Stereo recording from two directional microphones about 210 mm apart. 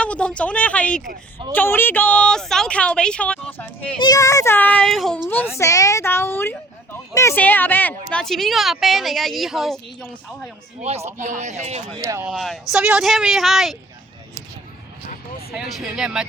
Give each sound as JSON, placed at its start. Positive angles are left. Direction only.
{"t": 0.0, "sound": "a woman's voice", "side_deg": 5}
{"t": 5.5, "sound": "a woman's voice", "side_deg": 15}
{"t": 10.8, "sound": "speech", "side_deg": -30}
{"t": 11.9, "sound": "speech", "side_deg": -15}
{"t": 12.3, "sound": "speech", "side_deg": 0}
{"t": 15.8, "sound": "speech", "side_deg": -5}